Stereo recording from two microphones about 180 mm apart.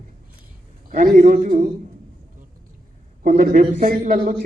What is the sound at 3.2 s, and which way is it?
Speech, 50° right (ahead or behind).